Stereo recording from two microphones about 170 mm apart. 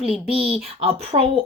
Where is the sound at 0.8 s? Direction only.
35° right (ahead or behind).